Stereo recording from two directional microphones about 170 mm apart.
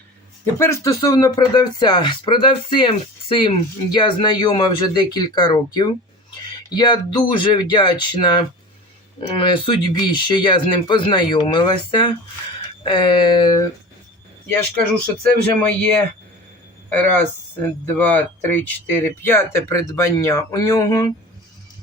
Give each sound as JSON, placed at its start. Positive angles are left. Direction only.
{"t": 0.6, "sound": "speech", "side_deg": 15}
{"t": 14.4, "sound": "speech", "side_deg": 10}
{"t": 17.8, "sound": "speech", "side_deg": 10}